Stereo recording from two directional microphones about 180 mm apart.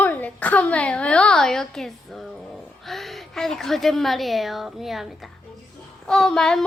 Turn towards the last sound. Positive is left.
turn(degrees=5)  # may be behind; listen again after turning